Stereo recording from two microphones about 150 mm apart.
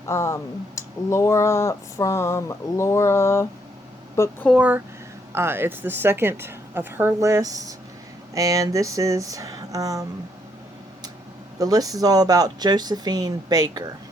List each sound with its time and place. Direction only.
0.1 s speech: 20° left (ahead or behind)
4.4 s a woman's voice: 5° right (ahead or behind); by 10.1 s 25° right (ahead or behind)
11.6 s speech: 25° right (ahead or behind)